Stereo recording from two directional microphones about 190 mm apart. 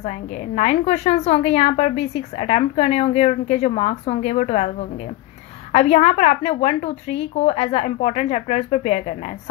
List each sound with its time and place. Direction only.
0.6 s a woman's voice: 35° left (ahead or behind)